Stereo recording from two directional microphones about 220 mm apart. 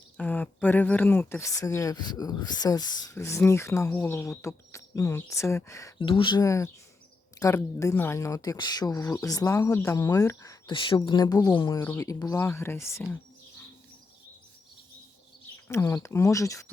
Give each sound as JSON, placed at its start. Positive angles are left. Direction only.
{"t": 0.2, "sound": "speech", "side_deg": 5}
{"t": 15.7, "sound": "speech", "side_deg": 15}